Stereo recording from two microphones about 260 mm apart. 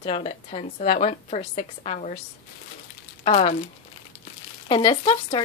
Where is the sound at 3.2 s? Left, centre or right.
Left.